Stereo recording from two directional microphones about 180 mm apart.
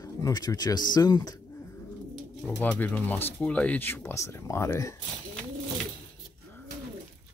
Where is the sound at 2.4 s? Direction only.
10° left (ahead or behind).